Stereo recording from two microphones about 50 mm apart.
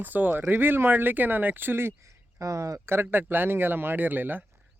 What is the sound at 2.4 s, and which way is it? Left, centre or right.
Speech, right.